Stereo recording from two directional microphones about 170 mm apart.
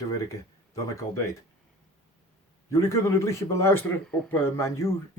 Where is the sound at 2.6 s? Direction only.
15° left (ahead or behind).